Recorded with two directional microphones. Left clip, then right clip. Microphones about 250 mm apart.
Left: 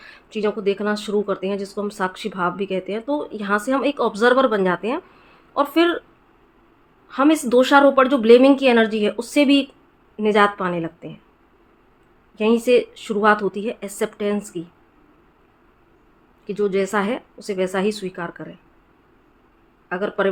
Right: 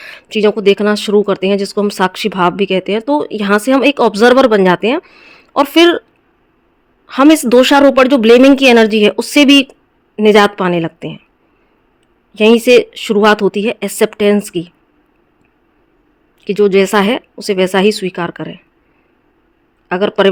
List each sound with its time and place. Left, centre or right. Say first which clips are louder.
0.0 s speech: right 11 dB; right
7.1 s speech: right 9 dB; right
12.3 s speech: right 9 dB; right
16.4 s speech: right 11 dB; right
19.9 s speech: right 10 dB; right